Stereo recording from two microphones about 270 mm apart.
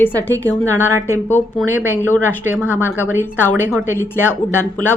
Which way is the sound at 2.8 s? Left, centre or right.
Centre.